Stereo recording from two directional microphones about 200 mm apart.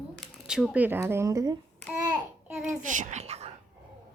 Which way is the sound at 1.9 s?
5° right (ahead or behind).